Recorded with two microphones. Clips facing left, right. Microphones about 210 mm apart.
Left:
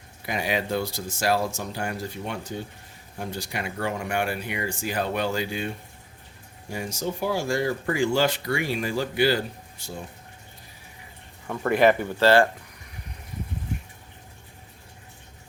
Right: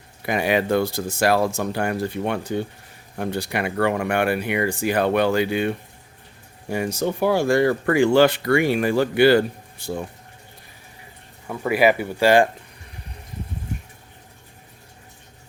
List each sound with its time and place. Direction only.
0.3 s speech: 55° right (ahead or behind)
11.4 s speech: 5° right (ahead or behind)